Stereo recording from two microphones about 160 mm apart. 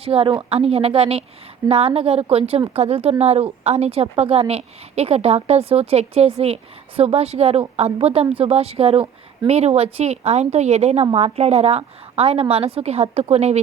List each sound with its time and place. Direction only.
0.0 s a woman's voice: 35° right (ahead or behind)